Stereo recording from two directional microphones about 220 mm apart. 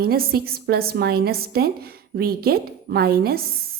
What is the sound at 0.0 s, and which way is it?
A woman's voice, 45° right (ahead or behind).